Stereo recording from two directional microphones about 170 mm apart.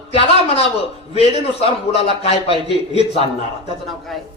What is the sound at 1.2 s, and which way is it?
A man's voice, 35° left (ahead or behind).